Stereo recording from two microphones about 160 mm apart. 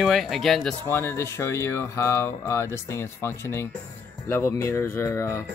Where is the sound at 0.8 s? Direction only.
15° left (ahead or behind).